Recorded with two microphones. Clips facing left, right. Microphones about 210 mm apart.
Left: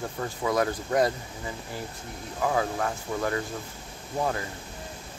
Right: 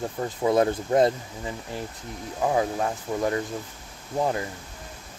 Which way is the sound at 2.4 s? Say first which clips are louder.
Right 3 dB; 20° right (ahead or behind).